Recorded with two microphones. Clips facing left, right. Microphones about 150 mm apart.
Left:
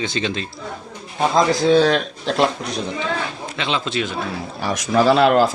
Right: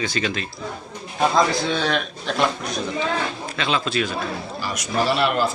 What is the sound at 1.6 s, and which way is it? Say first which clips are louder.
Speech: left 8 dB; 40° left (ahead or behind).